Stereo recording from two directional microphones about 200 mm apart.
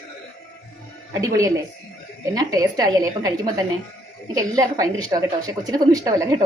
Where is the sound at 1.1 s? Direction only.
15° right (ahead or behind).